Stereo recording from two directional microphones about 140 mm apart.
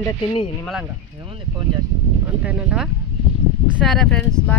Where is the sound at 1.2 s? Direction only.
35° right (ahead or behind).